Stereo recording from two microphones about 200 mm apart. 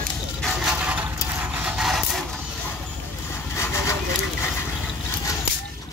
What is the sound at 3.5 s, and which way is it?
Vehicle, 15° left (ahead or behind).